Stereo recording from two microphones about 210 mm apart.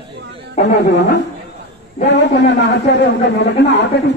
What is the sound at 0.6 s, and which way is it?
A man's voice, 55° left (ahead or behind).